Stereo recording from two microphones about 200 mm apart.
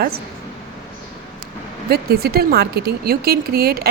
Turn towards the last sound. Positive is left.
turn(degrees=-50)  # may be behind; listen again after turning